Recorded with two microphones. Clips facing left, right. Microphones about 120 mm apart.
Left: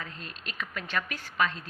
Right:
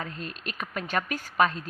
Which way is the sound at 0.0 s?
50° right (ahead or behind).